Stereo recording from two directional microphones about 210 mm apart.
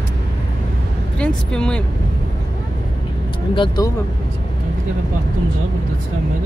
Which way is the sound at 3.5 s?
20° left (ahead or behind).